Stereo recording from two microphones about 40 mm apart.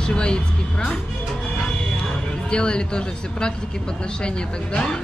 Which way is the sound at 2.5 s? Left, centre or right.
Left.